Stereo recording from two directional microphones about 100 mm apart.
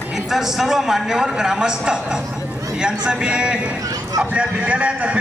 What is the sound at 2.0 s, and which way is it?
A man's voice, 10° right (ahead or behind).